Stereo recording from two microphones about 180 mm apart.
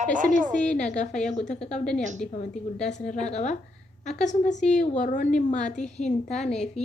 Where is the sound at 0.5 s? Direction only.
45° left (ahead or behind).